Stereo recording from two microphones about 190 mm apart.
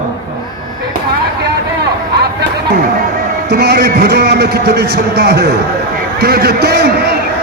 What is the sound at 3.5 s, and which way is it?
A man's voice, 55° right (ahead or behind).